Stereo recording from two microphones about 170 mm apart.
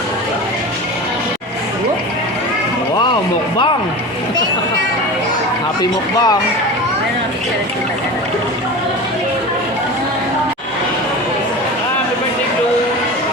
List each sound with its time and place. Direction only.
5.8 s speech: 25° left (ahead or behind)